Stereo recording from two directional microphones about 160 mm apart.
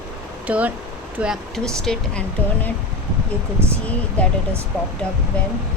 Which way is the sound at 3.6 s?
15° right (ahead or behind).